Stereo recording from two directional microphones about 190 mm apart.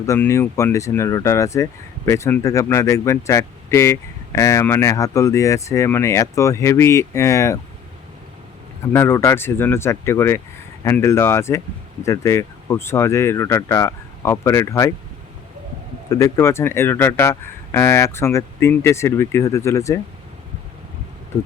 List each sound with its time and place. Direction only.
0.0 s speech: 15° left (ahead or behind)
8.9 s speech: 15° left (ahead or behind)
16.0 s speech: 15° left (ahead or behind)